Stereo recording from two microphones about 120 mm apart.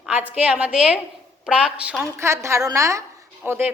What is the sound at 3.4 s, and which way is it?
Speech, 15° right (ahead or behind).